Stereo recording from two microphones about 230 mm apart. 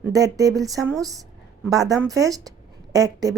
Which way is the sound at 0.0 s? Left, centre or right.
Centre.